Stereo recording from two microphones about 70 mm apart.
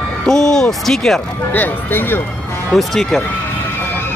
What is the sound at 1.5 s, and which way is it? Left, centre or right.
Speech, left.